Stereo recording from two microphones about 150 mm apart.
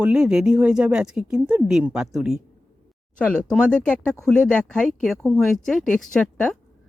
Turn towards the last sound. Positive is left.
turn(degrees=5)  # may be behind; listen again after turning